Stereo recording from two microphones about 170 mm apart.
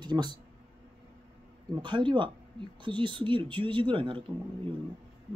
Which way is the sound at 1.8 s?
30° right (ahead or behind).